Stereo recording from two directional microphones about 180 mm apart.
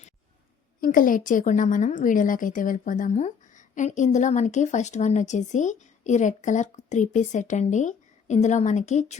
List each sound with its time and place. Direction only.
0.8 s a woman's voice: 50° left (ahead or behind)